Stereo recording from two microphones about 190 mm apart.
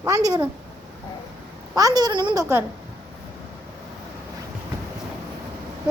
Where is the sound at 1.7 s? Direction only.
20° right (ahead or behind).